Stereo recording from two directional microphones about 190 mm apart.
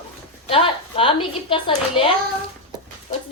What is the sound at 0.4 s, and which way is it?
Speech, 30° left (ahead or behind).